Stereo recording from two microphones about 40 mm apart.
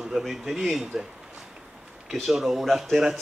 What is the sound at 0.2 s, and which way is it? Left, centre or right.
Speech, centre.